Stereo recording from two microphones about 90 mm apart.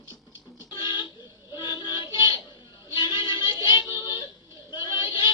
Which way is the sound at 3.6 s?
55° left (ahead or behind).